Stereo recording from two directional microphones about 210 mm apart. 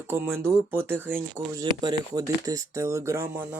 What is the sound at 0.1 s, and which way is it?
Speech, 10° right (ahead or behind).